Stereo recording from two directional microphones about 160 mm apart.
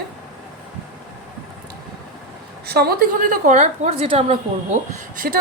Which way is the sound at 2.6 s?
75° right (ahead or behind).